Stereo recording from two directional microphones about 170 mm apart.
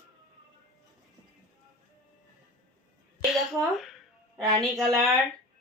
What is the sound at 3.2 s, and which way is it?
A woman's voice, centre (ahead or behind).